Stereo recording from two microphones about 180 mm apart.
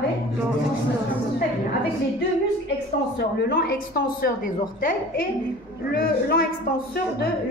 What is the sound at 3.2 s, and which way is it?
A woman's voice, 60° left (ahead or behind).